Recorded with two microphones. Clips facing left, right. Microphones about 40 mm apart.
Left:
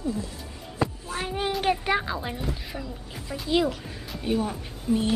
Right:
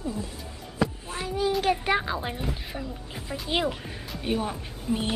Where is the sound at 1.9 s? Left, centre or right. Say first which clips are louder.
Even; centre.